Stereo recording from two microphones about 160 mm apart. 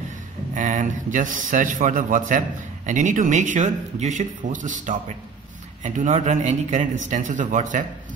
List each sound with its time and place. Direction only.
0.6 s a man's voice: 55° right (ahead or behind)